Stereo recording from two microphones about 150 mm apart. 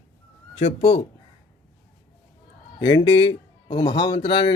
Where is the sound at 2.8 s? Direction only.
30° left (ahead or behind).